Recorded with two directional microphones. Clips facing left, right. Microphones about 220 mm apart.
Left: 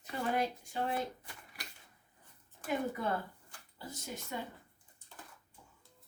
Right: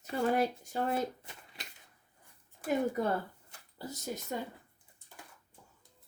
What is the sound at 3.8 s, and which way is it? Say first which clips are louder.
Speech: right 5 dB; 40° right (ahead or behind).